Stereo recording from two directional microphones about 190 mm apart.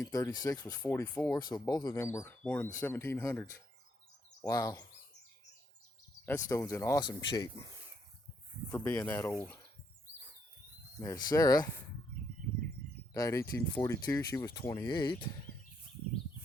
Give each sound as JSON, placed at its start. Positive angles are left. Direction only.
{"t": 0.0, "sound": "speech", "side_deg": 20}
{"t": 1.4, "sound": "speech", "side_deg": 20}
{"t": 6.2, "sound": "speech", "side_deg": 10}
{"t": 8.7, "sound": "speech", "side_deg": 10}
{"t": 11.0, "sound": "speech", "side_deg": 20}
{"t": 13.1, "sound": "speech", "side_deg": 15}